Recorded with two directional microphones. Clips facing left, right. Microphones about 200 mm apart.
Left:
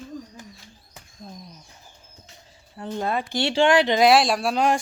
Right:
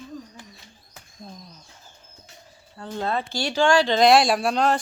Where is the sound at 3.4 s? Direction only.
25° left (ahead or behind).